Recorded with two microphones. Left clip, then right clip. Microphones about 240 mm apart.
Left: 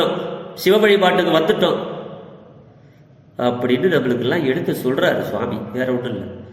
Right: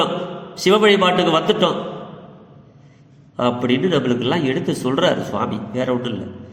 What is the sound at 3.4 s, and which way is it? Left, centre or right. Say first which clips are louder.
A man's voice: left 1 dB; right.